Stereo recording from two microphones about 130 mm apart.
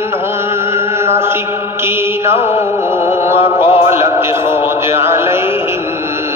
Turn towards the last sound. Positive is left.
turn(degrees=-20)  # may be behind; listen again after turning